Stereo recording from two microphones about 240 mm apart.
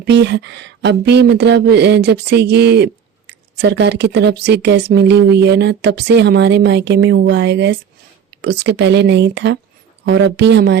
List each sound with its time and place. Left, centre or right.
0.0 s speech: right